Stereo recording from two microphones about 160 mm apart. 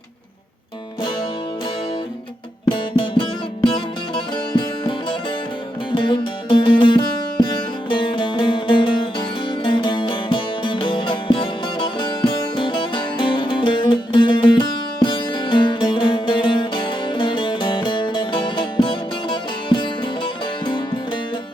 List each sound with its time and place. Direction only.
2.6 s music: 30° left (ahead or behind)
4.5 s music: 30° left (ahead or behind)